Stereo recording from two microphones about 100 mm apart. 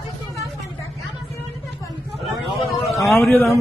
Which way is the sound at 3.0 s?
Centre (ahead or behind).